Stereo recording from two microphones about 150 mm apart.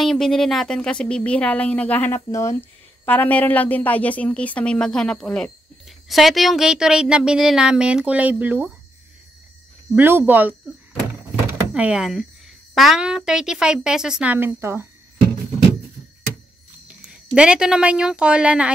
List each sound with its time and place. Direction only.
0.0 s a woman's voice: 5° left (ahead or behind)
9.9 s a woman's voice: 15° right (ahead or behind)
16.8 s speech: 5° right (ahead or behind)